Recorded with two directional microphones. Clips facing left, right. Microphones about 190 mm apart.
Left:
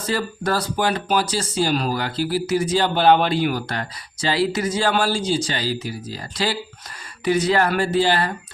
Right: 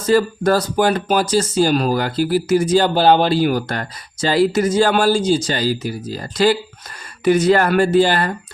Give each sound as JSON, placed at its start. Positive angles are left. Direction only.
{"t": 0.1, "sound": "speech", "side_deg": -45}